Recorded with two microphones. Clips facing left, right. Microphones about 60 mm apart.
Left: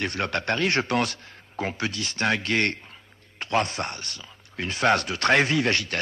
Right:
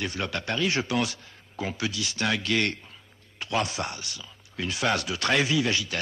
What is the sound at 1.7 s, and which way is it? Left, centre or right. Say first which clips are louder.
Speech: right 2 dB; left.